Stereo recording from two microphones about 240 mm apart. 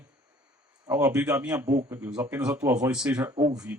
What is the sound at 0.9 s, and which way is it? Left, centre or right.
Speech, centre.